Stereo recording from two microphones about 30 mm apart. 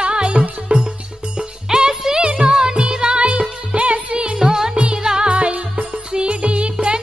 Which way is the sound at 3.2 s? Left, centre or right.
Right.